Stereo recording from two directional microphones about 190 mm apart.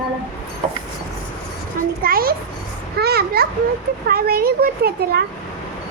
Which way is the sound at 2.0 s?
50° right (ahead or behind).